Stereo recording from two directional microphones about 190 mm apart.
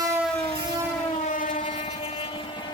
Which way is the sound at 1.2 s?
45° left (ahead or behind).